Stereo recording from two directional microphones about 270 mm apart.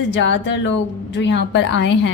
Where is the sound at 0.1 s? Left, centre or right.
Left.